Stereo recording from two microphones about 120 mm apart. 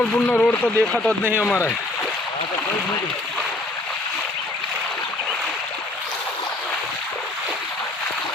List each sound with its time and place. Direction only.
0.3 s speech: 10° left (ahead or behind)
1.2 s speech: 15° right (ahead or behind)